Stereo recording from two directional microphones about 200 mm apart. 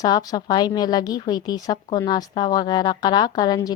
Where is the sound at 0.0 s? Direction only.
20° left (ahead or behind).